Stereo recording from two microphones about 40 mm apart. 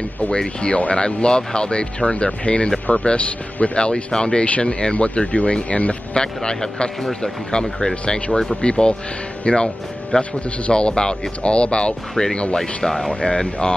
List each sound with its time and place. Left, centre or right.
0.4 s speech: left
0.7 s speech: left
1.0 s speech: left
6.1 s speech: centre
7.9 s speech: left
8.3 s speech: centre
8.5 s speech: left
12.5 s speech: centre
13.1 s speech: left